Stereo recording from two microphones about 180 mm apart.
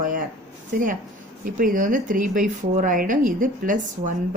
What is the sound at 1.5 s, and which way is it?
Speech, 50° right (ahead or behind).